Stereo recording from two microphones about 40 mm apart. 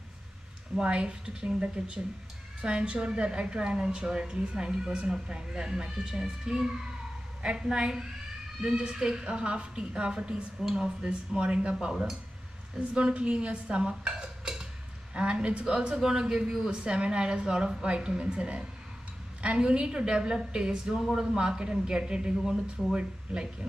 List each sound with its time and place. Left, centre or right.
0.7 s a woman's voice: right
2.6 s a woman's voice: right
12.9 s dishes: right
15.1 s a woman's voice: right; by 16.6 s centre
16.6 s a woman's voice: right
22.9 s a woman's voice: right